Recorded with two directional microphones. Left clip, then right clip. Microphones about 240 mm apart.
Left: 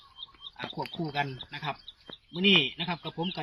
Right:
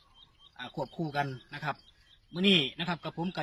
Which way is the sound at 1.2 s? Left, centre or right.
Centre.